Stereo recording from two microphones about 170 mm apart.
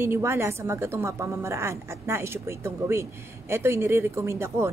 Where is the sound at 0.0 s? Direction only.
15° right (ahead or behind).